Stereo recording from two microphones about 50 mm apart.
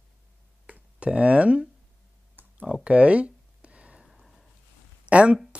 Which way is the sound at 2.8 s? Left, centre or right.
Right.